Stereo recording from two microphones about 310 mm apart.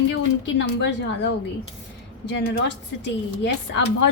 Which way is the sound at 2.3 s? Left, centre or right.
Left.